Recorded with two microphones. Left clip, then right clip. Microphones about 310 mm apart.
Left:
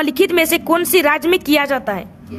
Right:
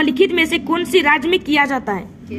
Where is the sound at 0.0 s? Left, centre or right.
Left.